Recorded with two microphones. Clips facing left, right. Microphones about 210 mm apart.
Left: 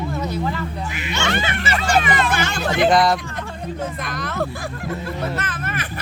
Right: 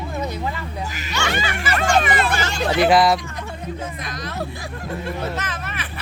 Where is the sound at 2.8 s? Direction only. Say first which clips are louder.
Even; 5° right (ahead or behind).